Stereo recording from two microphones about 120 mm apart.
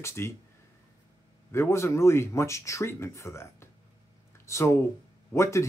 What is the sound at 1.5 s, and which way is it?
Speech, 20° left (ahead or behind).